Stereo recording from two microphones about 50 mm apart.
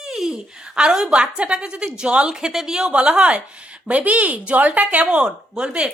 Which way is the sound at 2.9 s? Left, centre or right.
Right.